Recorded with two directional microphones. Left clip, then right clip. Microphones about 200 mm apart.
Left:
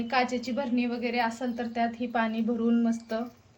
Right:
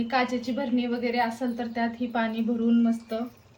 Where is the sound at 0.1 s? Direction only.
40° left (ahead or behind).